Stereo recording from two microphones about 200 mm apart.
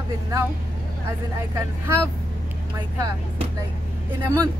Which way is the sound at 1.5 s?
10° right (ahead or behind).